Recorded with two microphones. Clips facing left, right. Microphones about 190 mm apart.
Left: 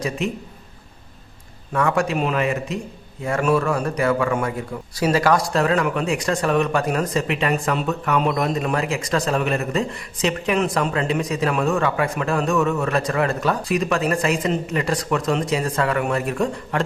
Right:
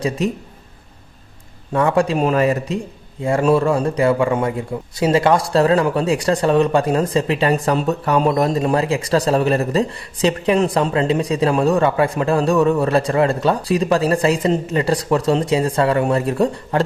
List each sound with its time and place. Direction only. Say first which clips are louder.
1.7 s a man's voice: right 4 dB; 30° right (ahead or behind)